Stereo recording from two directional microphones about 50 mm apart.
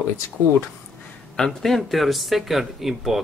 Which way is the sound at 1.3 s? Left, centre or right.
Centre.